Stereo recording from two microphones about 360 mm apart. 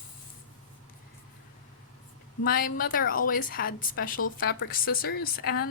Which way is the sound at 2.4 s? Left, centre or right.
Left.